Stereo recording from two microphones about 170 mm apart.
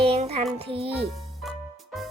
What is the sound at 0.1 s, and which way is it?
Child singing, 35° right (ahead or behind).